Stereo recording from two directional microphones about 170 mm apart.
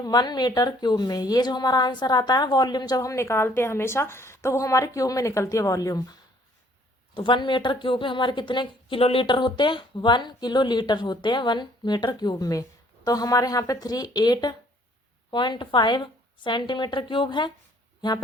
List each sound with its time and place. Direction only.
0.0 s a woman's voice: 25° left (ahead or behind)